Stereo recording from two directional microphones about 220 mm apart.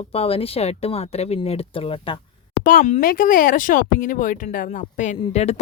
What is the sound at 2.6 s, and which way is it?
Speech, 35° left (ahead or behind).